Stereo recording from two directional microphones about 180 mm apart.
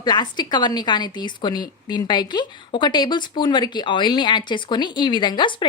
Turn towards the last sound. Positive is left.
turn(degrees=25)  # may be behind; listen again after turning